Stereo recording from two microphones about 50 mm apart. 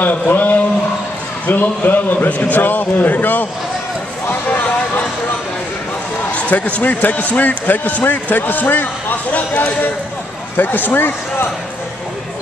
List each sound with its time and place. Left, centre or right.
0.0 s speech: left
6.5 s speech: left
10.5 s speech: left